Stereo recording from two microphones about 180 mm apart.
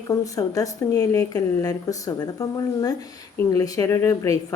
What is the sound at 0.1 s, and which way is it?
A woman's voice, 20° left (ahead or behind).